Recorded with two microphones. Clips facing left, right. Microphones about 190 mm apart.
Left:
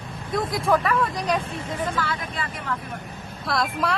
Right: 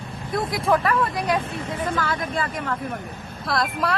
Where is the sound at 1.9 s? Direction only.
45° right (ahead or behind).